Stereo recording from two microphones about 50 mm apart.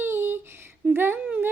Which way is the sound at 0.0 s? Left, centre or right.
Right.